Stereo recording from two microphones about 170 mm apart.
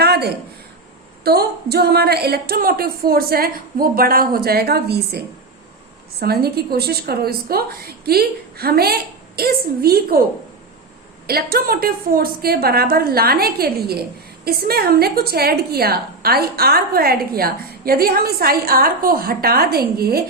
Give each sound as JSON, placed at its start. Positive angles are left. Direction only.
{"t": 0.0, "sound": "a sound", "side_deg": -70}
{"t": 1.2, "sound": "a woman's voice", "side_deg": -65}
{"t": 11.3, "sound": "a woman's voice", "side_deg": -65}